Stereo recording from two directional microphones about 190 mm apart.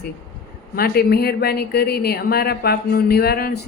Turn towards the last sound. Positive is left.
turn(degrees=55)  # may be behind; listen again after turning